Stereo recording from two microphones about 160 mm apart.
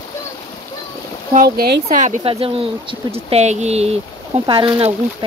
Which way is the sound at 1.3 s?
65° right (ahead or behind).